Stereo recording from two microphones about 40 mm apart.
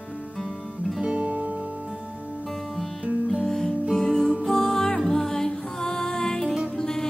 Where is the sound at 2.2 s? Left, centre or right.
Left.